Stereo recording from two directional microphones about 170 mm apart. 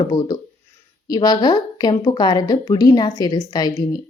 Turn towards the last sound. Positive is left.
turn(degrees=25)  # may be behind; listen again after turning